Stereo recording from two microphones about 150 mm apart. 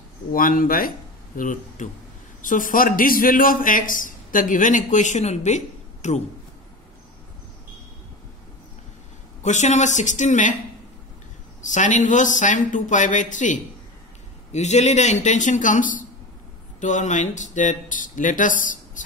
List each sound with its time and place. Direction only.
0.3 s a man's voice: 70° left (ahead or behind); by 6.2 s 50° left (ahead or behind)
9.4 s speech: 50° left (ahead or behind)
11.6 s a man's voice: 55° left (ahead or behind)